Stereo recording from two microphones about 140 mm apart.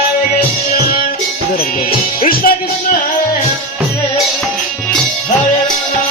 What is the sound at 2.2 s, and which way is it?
Music, 90° left.